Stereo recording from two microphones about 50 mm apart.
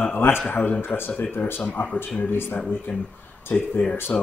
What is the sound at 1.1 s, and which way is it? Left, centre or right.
Speech, left.